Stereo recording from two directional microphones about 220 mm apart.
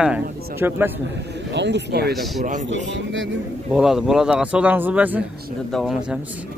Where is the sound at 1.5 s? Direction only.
50° right (ahead or behind).